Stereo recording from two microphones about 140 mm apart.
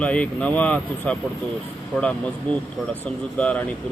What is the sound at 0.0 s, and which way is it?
Speech, 10° left (ahead or behind).